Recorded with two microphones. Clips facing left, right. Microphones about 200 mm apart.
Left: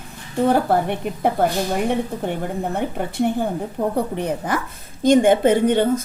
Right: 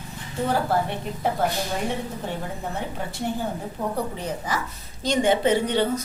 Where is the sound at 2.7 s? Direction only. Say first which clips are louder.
Left 8 dB; 60° left (ahead or behind).